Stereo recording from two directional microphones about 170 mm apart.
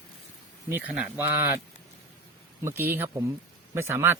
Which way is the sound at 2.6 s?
15° right (ahead or behind).